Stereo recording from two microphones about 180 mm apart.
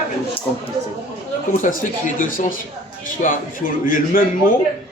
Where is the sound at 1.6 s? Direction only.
50° left (ahead or behind).